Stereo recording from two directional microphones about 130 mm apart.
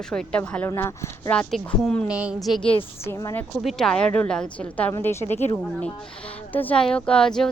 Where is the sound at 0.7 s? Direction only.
20° left (ahead or behind).